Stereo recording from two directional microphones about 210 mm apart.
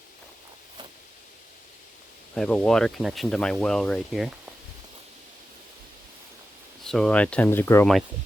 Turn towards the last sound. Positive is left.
turn(degrees=10)  # may be behind; listen again after turning